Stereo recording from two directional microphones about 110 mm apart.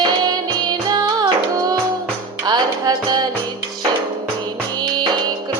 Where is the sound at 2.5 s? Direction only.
40° right (ahead or behind).